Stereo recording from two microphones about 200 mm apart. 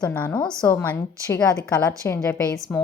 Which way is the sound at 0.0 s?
10° left (ahead or behind).